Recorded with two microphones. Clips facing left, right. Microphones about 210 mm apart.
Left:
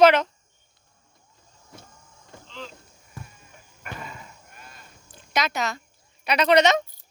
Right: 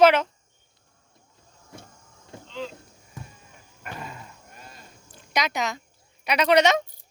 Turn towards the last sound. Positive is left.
turn(degrees=-10)  # may be behind; listen again after turning